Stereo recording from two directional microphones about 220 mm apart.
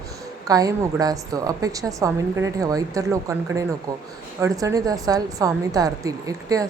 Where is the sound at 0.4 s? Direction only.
15° right (ahead or behind).